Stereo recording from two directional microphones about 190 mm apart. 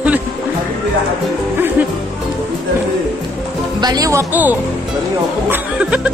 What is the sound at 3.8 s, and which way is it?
Speech, 20° right (ahead or behind).